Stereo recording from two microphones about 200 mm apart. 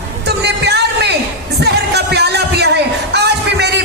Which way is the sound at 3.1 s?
55° right (ahead or behind).